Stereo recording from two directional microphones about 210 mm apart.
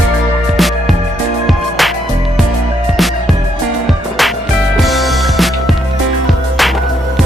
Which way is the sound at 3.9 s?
Centre (ahead or behind).